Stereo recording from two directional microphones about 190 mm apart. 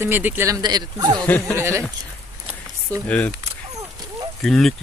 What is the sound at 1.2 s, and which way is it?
Speech, 10° left (ahead or behind).